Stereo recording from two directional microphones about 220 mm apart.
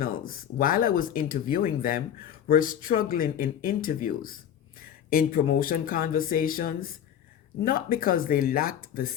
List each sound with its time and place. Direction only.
0.0 s speech: 40° left (ahead or behind)